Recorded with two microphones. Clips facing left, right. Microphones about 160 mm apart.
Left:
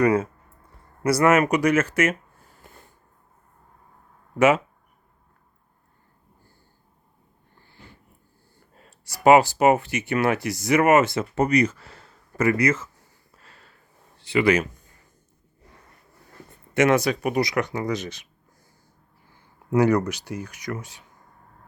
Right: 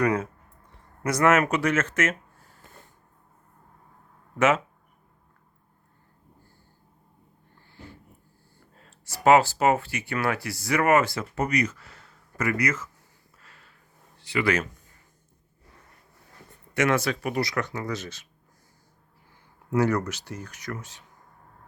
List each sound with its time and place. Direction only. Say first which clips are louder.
0.0 s speech: left 5 dB; 5° left (ahead or behind)
4.4 s speech: left 4 dB; 10° left (ahead or behind)
8.7 s speech: right 1 dB; 10° left (ahead or behind)
13.3 s a sound: left 3 dB; 30° left (ahead or behind)
14.2 s speech: left 5 dB; 25° left (ahead or behind)
16.7 s speech: left 5 dB; 20° left (ahead or behind)
19.7 s speech: left 4 dB; 15° left (ahead or behind)